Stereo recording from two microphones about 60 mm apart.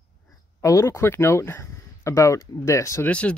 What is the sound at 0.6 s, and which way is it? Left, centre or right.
Speech, left.